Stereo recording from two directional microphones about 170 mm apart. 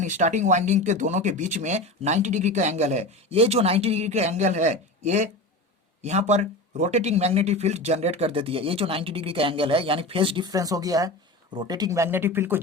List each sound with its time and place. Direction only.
0.0 s speech: 45° right (ahead or behind); by 12.5 s 10° right (ahead or behind)